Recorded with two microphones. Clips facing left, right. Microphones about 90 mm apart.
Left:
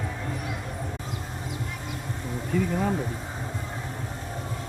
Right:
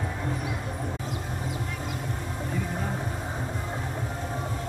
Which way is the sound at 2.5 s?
90° left.